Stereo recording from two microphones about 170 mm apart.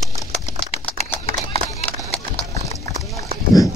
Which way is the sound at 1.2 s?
40° left (ahead or behind).